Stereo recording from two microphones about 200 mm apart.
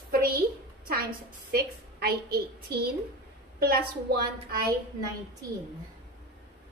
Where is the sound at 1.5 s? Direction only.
50° right (ahead or behind).